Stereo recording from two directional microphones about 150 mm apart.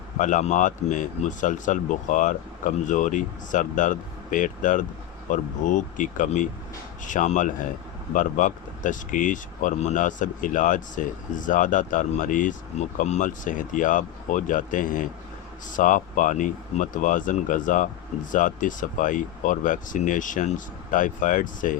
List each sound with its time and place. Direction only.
0.2 s speech: 55° left (ahead or behind)